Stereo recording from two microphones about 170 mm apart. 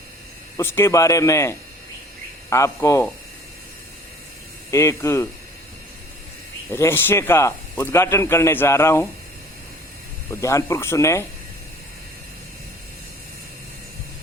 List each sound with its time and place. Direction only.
0.5 s speech: 15° left (ahead or behind)
4.7 s speech: 15° left (ahead or behind)
6.7 s speech: 15° left (ahead or behind)
10.4 s speech: 15° left (ahead or behind)